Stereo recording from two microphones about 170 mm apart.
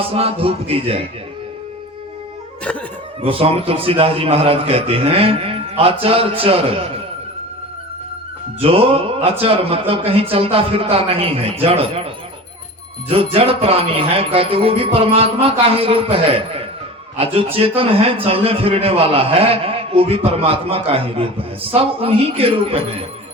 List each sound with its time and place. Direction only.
0.0 s a man's voice: 35° right (ahead or behind)
3.2 s a man's voice: 35° right (ahead or behind)
8.6 s a man's voice: 35° right (ahead or behind)